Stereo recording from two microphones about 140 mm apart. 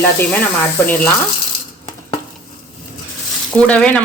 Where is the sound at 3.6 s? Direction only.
10° left (ahead or behind).